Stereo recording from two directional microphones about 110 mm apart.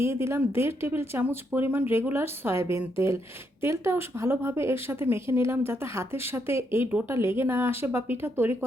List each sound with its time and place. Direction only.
0.0 s speech: 25° right (ahead or behind)